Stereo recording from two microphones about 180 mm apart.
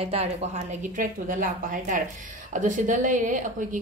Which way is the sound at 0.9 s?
50° right (ahead or behind).